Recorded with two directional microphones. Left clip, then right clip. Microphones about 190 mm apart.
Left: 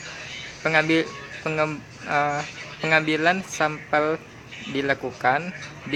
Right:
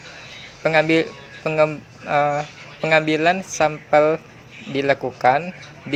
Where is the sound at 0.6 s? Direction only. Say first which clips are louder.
Right 4 dB; 20° right (ahead or behind).